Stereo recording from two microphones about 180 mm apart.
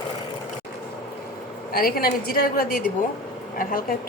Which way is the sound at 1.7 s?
55° left (ahead or behind).